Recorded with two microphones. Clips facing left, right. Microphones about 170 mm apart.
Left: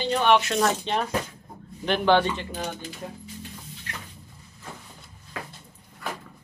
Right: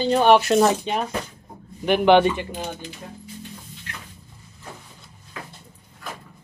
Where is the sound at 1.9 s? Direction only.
15° right (ahead or behind).